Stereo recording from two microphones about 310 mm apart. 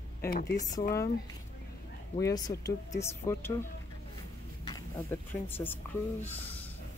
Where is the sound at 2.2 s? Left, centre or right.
Centre.